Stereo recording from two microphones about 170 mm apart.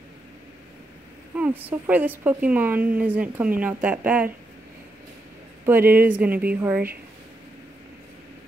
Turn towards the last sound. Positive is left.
turn(degrees=-10)  # may be behind; listen again after turning